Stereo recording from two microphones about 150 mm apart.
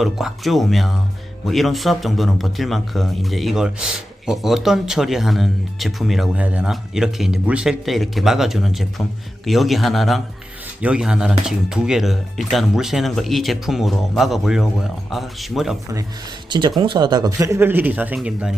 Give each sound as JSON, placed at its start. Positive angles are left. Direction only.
{"t": 0.0, "sound": "speech", "side_deg": 0}
{"t": 16.5, "sound": "speech", "side_deg": -30}
{"t": 17.4, "sound": "speech", "side_deg": -15}